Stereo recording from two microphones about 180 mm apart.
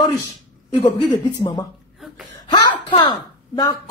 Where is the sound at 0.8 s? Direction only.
30° left (ahead or behind).